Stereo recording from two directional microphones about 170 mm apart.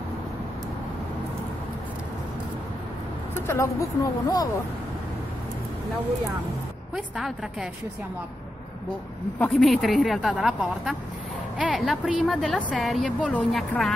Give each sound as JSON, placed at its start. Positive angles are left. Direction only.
{"t": 3.3, "sound": "speech", "side_deg": 15}
{"t": 9.4, "sound": "speech", "side_deg": 0}